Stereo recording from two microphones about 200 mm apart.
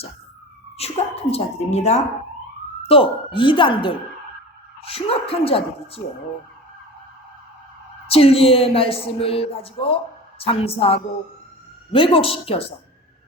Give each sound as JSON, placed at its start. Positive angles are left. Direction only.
{"t": 0.8, "sound": "a woman's voice", "side_deg": 30}
{"t": 8.0, "sound": "speech", "side_deg": 30}